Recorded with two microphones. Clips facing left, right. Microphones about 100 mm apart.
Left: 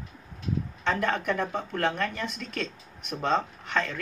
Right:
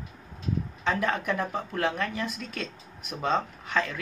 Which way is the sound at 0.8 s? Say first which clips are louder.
Even; 5° right (ahead or behind).